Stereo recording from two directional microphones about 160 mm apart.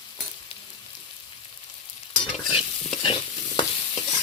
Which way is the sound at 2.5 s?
40° left (ahead or behind).